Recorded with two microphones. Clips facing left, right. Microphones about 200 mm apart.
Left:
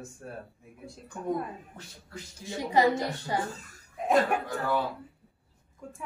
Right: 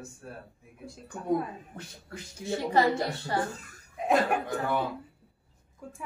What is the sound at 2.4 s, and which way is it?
Speech, 15° left (ahead or behind).